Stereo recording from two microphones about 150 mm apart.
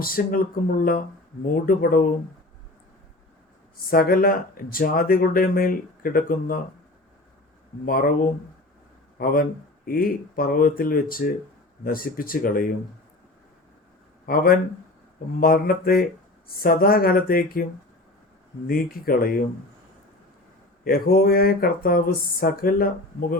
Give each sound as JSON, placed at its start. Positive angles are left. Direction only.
{"t": 0.0, "sound": "speech", "side_deg": 75}
{"t": 3.8, "sound": "speech", "side_deg": 80}
{"t": 7.9, "sound": "speech", "side_deg": 75}
{"t": 14.3, "sound": "speech", "side_deg": 80}
{"t": 18.7, "sound": "speech", "side_deg": 75}
{"t": 20.8, "sound": "speech", "side_deg": 75}